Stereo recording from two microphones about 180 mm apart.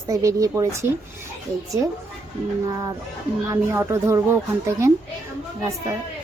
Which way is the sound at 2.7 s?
20° right (ahead or behind).